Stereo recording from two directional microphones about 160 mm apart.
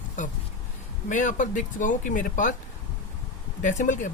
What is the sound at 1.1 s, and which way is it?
Speech, 50° left (ahead or behind).